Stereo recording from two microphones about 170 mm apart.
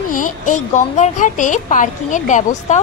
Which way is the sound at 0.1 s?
50° left (ahead or behind).